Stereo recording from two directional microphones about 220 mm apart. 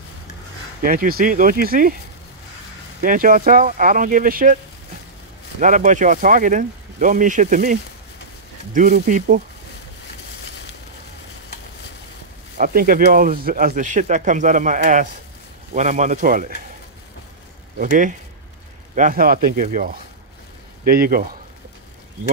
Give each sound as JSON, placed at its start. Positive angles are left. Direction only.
{"t": 0.8, "sound": "speech", "side_deg": -40}
{"t": 3.0, "sound": "speech", "side_deg": -40}
{"t": 5.6, "sound": "speech", "side_deg": -35}
{"t": 12.5, "sound": "speech", "side_deg": -40}
{"t": 17.7, "sound": "speech", "side_deg": -35}